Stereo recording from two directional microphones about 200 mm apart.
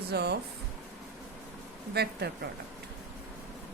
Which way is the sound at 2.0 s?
55° right (ahead or behind).